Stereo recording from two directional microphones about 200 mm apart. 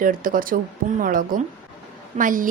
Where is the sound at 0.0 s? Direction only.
45° right (ahead or behind).